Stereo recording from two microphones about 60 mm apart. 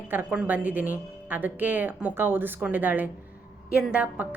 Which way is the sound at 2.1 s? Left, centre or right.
Right.